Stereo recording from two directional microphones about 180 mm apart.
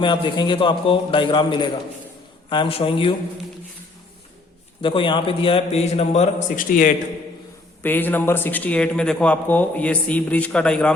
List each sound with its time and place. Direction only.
0.0 s a man's voice: 25° left (ahead or behind)
4.8 s a man's voice: 30° left (ahead or behind)
6.7 s a man's voice: 45° left (ahead or behind)
7.8 s a man's voice: 10° left (ahead or behind)